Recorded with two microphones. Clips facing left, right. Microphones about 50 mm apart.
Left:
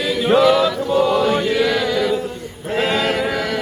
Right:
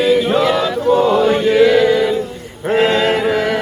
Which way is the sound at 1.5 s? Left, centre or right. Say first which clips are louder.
Right 7 dB; right.